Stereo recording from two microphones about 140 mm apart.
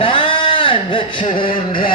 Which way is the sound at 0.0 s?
40° left (ahead or behind).